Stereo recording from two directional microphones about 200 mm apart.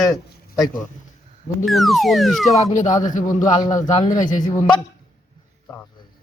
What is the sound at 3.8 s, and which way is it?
Speech, 35° left (ahead or behind).